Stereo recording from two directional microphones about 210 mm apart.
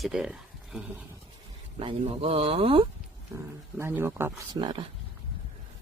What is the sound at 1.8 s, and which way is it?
Speech, 25° right (ahead or behind).